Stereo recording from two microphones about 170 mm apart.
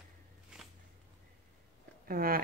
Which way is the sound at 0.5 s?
5° right (ahead or behind).